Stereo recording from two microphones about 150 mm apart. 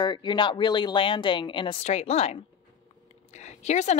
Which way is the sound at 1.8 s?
45° left (ahead or behind).